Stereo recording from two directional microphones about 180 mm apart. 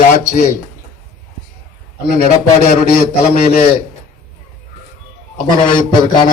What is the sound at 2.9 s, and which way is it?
Speech, 55° left (ahead or behind).